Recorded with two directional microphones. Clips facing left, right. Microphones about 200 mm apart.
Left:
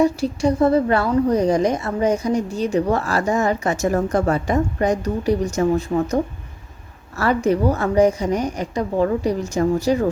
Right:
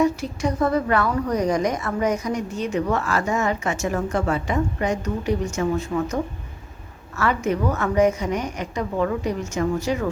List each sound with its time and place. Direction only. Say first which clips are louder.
0.0 s a woman's voice: left 4 dB; 30° left (ahead or behind)
7.2 s a woman's voice: left 4 dB; 35° left (ahead or behind)